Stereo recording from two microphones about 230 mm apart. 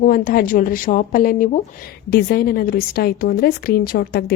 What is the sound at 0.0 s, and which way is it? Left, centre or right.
A woman's voice, left.